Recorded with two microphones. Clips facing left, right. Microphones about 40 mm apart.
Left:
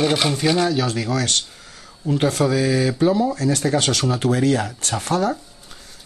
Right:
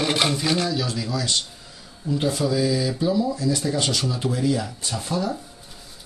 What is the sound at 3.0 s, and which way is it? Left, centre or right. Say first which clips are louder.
Speech: left 4 dB; left.